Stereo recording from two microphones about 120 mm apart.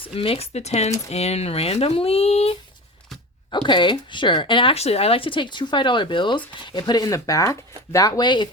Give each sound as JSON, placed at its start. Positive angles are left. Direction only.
{"t": 0.1, "sound": "speech", "side_deg": 50}
{"t": 3.7, "sound": "speech", "side_deg": 40}